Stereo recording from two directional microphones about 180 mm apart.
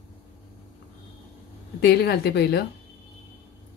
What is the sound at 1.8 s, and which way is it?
Speech, 65° left (ahead or behind).